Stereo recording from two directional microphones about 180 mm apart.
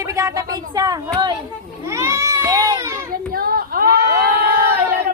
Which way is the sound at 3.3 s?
55° right (ahead or behind).